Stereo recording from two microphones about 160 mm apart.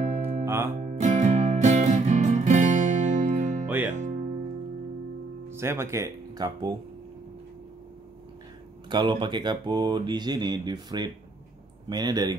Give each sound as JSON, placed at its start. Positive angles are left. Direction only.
{"t": 0.0, "sound": "music", "side_deg": -45}
{"t": 3.6, "sound": "music", "side_deg": -10}
{"t": 5.5, "sound": "speech", "side_deg": -15}
{"t": 8.8, "sound": "speech", "side_deg": -30}